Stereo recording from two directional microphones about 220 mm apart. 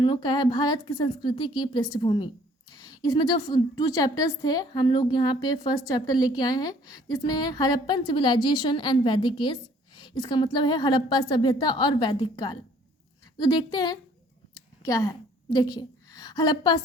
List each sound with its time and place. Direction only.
0.0 s a woman's voice: 20° left (ahead or behind)